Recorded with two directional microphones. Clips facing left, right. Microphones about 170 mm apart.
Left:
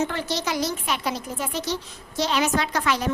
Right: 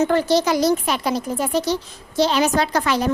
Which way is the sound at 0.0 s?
40° right (ahead or behind).